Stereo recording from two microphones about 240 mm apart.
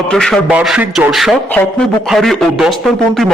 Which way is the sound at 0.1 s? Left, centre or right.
Centre.